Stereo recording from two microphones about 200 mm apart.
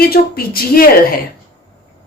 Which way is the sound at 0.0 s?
50° left (ahead or behind).